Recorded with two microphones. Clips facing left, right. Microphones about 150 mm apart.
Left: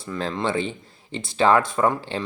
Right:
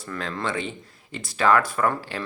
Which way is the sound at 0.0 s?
30° left (ahead or behind).